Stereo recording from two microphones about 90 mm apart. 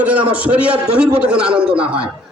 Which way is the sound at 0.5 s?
15° right (ahead or behind).